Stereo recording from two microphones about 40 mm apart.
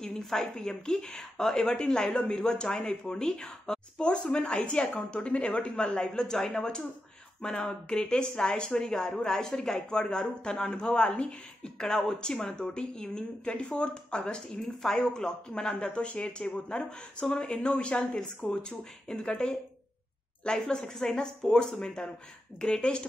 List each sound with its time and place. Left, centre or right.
0.0 s a woman's voice: centre
13.5 s a woman's voice: left